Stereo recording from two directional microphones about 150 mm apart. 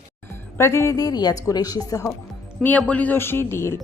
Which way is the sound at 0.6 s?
20° left (ahead or behind).